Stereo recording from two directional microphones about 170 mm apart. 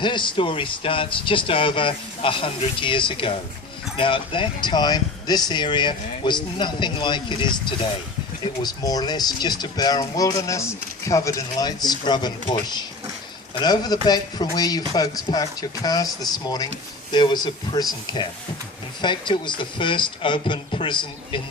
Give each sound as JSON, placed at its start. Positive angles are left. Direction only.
{"t": 0.0, "sound": "speech", "side_deg": 30}